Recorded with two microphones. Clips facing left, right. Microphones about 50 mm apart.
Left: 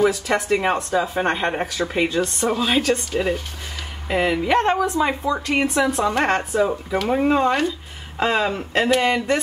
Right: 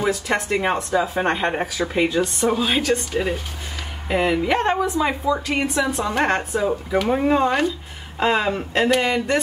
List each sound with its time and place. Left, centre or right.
0.0 s speech: centre
9.0 s speech: centre